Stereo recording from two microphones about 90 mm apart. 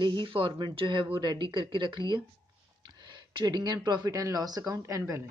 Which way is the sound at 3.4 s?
50° right (ahead or behind).